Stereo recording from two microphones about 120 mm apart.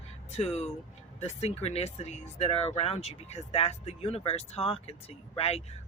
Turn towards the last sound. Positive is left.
turn(degrees=60)  # may be behind; listen again after turning